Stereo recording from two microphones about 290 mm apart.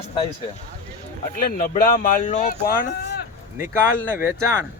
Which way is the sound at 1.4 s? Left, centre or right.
Left.